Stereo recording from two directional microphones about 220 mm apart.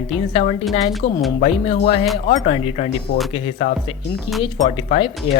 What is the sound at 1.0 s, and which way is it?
Speech, 55° left (ahead or behind).